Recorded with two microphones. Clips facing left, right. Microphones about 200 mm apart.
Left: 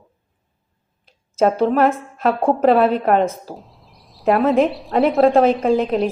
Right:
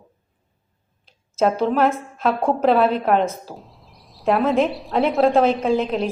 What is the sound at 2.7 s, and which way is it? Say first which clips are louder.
Speech: left 2 dB; 40° left (ahead or behind).